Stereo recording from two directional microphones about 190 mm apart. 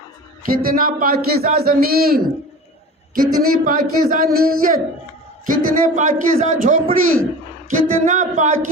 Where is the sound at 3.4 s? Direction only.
50° right (ahead or behind).